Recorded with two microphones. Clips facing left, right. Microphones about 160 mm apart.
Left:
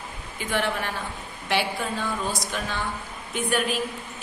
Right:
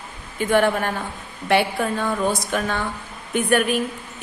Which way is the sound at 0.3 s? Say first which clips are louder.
Right 8 dB; 50° right (ahead or behind).